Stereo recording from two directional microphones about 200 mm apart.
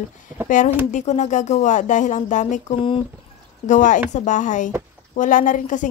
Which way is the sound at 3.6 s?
40° left (ahead or behind).